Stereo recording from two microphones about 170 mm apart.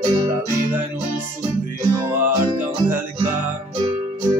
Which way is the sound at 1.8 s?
15° right (ahead or behind).